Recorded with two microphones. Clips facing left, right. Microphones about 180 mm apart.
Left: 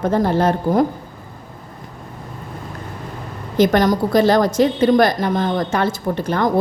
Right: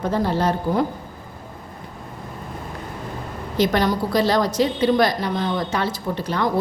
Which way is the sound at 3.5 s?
50° left (ahead or behind).